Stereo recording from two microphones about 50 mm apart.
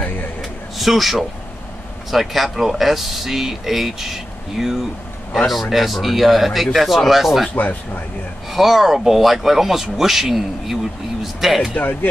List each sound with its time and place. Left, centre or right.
0.7 s speech: centre
7.5 s speech: left
8.5 s speech: centre
11.7 s speech: left